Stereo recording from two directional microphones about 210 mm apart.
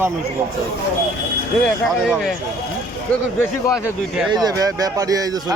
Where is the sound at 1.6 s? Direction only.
Centre (ahead or behind).